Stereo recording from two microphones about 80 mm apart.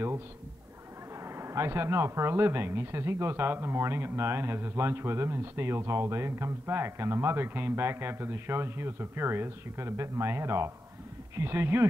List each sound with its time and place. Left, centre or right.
1.2 s speech: right